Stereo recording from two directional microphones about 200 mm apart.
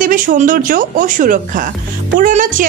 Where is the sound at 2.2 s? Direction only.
40° right (ahead or behind).